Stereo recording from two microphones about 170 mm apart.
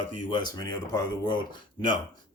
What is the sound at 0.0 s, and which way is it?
Speech, 30° left (ahead or behind).